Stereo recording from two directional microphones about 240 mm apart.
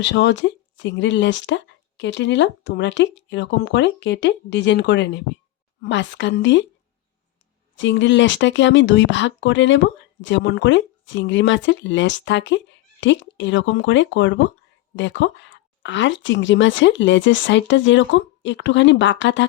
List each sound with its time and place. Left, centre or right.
0.0 s speech: left
7.8 s speech: left